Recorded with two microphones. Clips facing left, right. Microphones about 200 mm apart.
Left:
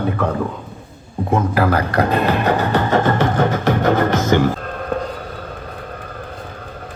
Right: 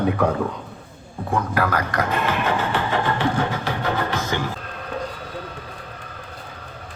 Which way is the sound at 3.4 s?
45° left (ahead or behind).